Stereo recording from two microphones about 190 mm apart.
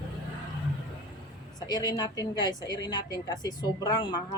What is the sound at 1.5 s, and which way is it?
A woman's voice, 20° left (ahead or behind).